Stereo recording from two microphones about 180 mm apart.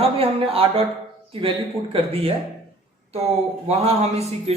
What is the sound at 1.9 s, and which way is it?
A man's voice, 30° right (ahead or behind).